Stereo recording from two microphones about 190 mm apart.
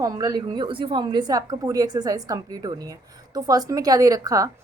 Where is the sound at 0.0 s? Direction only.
20° right (ahead or behind).